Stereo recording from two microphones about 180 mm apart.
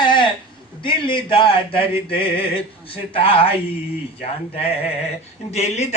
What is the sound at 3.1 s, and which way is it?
Speech, 30° left (ahead or behind).